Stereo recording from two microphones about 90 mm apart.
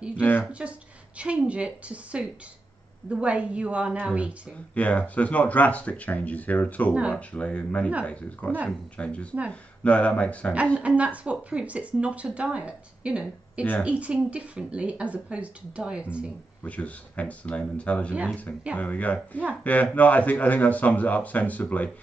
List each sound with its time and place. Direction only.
0.2 s speech: 20° left (ahead or behind)
0.5 s speech: 15° right (ahead or behind)
4.7 s speech: 15° left (ahead or behind)
10.8 s speech: 15° right (ahead or behind)
16.6 s speech: 15° left (ahead or behind)